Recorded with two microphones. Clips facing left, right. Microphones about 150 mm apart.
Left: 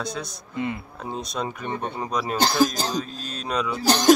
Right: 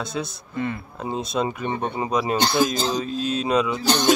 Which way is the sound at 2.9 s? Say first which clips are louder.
Right 6 dB; 5° right (ahead or behind).